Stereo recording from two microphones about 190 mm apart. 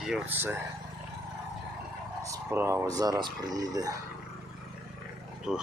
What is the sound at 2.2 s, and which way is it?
Speech, 15° right (ahead or behind).